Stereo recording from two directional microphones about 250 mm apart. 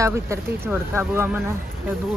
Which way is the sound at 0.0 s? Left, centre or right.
Centre.